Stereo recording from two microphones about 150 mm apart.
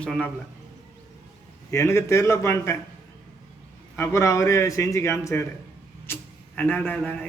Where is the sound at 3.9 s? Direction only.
20° left (ahead or behind).